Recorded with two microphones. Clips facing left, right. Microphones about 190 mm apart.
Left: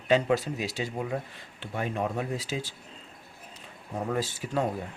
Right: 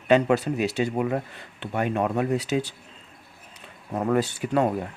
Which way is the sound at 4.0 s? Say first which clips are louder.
Right 7 dB; 65° right (ahead or behind).